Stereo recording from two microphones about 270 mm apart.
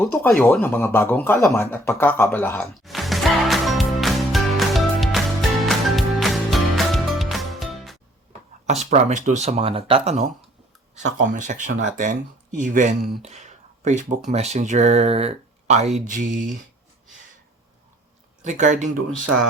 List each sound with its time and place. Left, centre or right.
0.0 s a sound: centre
5.6 s music: centre
8.3 s speech: right
13.2 s a sound: right
14.3 s speech: right
18.4 s speech: right